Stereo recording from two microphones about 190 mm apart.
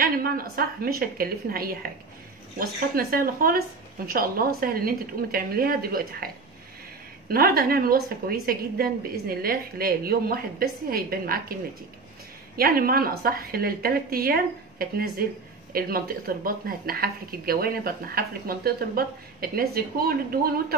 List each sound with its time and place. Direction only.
0.0 s a woman's voice: 50° right (ahead or behind)
12.5 s a woman's voice: 50° right (ahead or behind)